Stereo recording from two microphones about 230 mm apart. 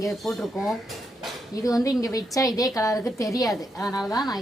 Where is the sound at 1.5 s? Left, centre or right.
Centre.